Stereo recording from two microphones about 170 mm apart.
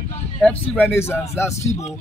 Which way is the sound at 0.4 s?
10° left (ahead or behind).